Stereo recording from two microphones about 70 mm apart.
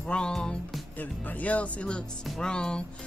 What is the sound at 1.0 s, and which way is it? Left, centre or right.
Music, left.